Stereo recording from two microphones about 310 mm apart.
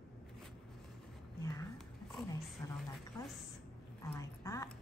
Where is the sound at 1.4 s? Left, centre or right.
Centre.